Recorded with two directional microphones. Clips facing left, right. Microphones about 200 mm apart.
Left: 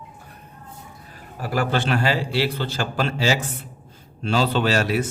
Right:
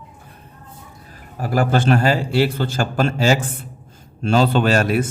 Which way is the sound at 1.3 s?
45° right (ahead or behind).